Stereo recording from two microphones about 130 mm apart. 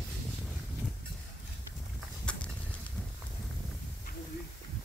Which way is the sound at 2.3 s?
10° left (ahead or behind).